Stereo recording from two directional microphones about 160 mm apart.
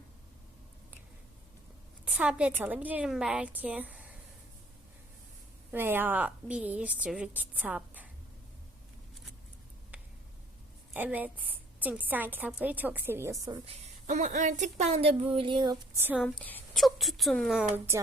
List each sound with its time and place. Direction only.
2.0 s a woman's voice: 5° right (ahead or behind)
5.7 s a woman's voice: 15° right (ahead or behind)
9.9 s a sound: 10° right (ahead or behind)
10.9 s a woman's voice: 10° right (ahead or behind)
13.7 s speech: 45° right (ahead or behind); by 15.8 s 30° right (ahead or behind)
16.0 s a woman's voice: 10° right (ahead or behind)
16.2 s a woman's voice: 10° left (ahead or behind)
16.8 s speech: centre (ahead or behind)